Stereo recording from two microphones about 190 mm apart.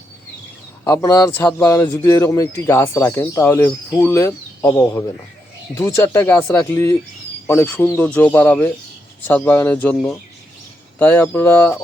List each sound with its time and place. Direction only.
0.9 s a man's voice: 20° left (ahead or behind)